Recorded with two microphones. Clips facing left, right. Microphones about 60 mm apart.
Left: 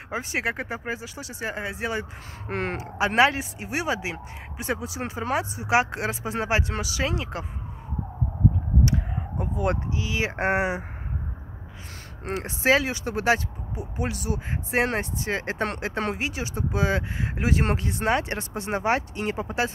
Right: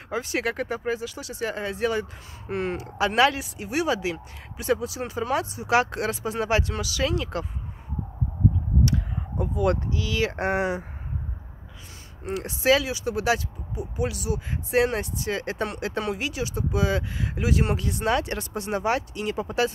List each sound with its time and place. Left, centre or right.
0.1 s speech: left
2.4 s speech: left
3.2 s speech: left
8.8 s speech: left
12.4 s speech: left